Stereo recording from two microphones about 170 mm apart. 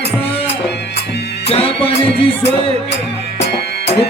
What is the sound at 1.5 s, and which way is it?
Music, 35° left (ahead or behind).